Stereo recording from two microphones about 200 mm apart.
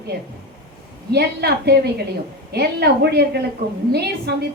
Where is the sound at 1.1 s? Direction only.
55° right (ahead or behind).